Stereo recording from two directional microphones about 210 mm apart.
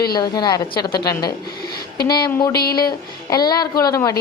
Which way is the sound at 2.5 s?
45° left (ahead or behind).